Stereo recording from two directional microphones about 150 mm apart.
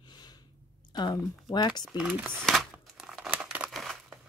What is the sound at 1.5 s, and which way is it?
Speech, 30° left (ahead or behind).